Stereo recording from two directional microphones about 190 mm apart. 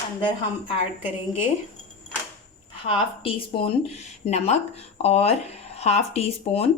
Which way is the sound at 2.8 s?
30° left (ahead or behind).